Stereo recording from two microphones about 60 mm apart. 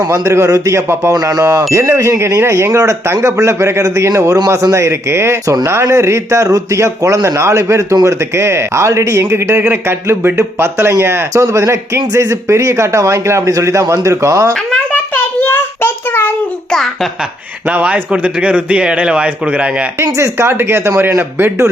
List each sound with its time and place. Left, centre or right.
0.1 s a man's voice: right
1.1 s wind chime: right
1.7 s a man's voice: right
9.6 s speech: right
9.8 s a man's voice: right
15.1 s a sound: left
17.7 s speech: right
20.0 s a man's voice: right